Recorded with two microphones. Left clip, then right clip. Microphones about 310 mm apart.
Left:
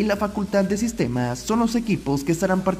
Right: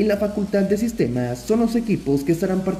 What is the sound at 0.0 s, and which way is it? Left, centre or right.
Speech, left.